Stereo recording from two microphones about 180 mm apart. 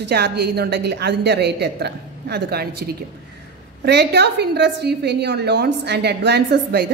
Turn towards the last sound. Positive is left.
turn(degrees=-65)  # may be behind; listen again after turning